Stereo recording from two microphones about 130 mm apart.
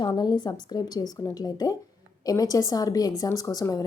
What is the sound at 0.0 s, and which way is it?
A woman's voice, 35° left (ahead or behind).